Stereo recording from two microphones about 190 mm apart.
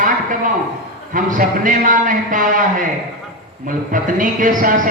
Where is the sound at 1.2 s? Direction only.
45° right (ahead or behind).